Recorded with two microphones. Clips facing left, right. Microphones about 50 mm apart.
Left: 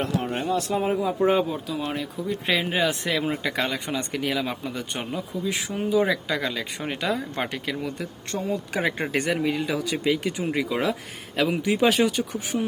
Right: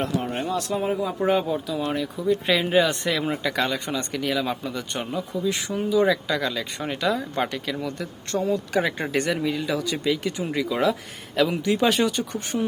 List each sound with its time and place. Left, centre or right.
0.3 s speech: centre
3.4 s speech: centre